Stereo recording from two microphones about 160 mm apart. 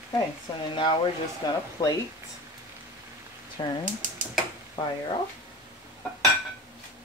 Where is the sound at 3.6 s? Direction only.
30° left (ahead or behind).